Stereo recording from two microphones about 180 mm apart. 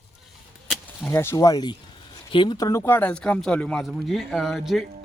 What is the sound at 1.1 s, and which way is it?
A man's voice, 15° left (ahead or behind).